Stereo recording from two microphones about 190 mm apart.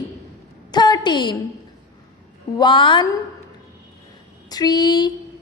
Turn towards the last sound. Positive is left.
turn(degrees=20)  # may be behind; listen again after turning